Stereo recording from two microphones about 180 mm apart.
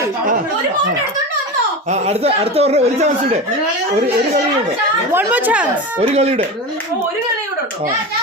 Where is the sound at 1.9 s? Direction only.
35° right (ahead or behind).